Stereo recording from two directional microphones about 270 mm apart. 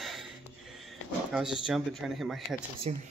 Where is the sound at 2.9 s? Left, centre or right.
Right.